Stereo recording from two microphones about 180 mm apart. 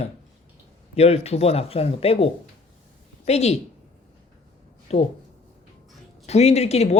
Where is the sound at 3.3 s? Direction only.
35° left (ahead or behind).